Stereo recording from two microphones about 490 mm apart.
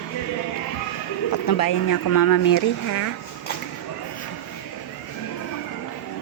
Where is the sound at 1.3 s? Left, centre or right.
Left.